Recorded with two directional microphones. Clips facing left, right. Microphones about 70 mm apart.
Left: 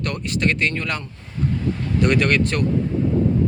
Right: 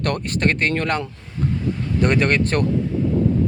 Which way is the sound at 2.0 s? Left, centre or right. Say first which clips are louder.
Even; right.